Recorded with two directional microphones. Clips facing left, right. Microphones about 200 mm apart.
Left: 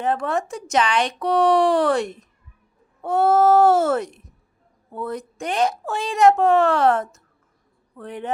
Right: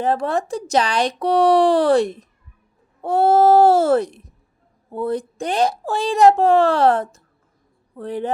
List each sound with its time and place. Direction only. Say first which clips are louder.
0.0 s a woman's voice: right 3 dB; 35° right (ahead or behind)